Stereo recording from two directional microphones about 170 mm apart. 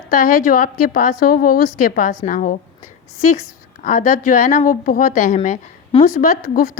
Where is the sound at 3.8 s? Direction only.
45° left (ahead or behind).